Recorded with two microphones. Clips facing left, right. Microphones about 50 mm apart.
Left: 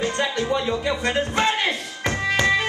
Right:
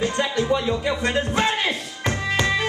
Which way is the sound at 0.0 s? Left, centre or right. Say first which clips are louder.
Right 1 dB; centre.